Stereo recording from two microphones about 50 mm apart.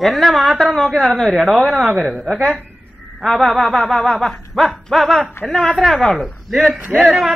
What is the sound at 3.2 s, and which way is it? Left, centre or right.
A man's voice, centre.